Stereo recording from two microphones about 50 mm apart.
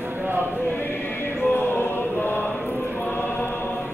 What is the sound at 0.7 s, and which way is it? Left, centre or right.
Choir, left.